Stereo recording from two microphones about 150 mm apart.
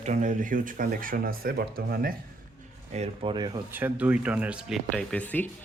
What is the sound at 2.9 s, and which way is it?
Speech, 35° right (ahead or behind).